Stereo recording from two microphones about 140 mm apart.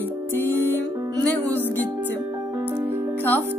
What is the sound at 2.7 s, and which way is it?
Music, 15° right (ahead or behind).